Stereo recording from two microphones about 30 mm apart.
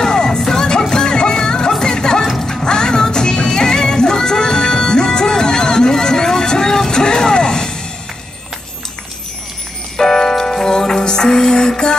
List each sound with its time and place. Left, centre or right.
0.0 s music: left
6.9 s a sound: left
9.9 s music: centre